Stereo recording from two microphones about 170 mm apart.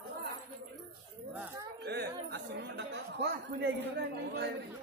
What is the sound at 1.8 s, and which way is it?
A woman's voice, 75° right (ahead or behind).